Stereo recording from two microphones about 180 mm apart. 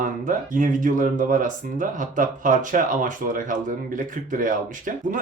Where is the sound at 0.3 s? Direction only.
45° right (ahead or behind).